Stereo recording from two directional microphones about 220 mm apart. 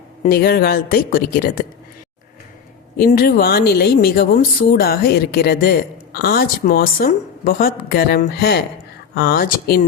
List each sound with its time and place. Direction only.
0.3 s speech: 45° left (ahead or behind)
3.0 s speech: 40° left (ahead or behind)